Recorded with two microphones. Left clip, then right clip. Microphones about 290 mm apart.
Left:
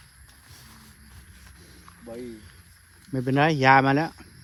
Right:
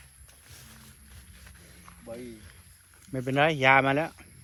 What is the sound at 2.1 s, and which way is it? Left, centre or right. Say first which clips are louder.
Speech: left 2 dB; left.